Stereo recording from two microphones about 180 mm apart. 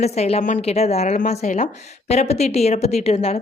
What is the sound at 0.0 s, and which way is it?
A woman's voice, 35° left (ahead or behind).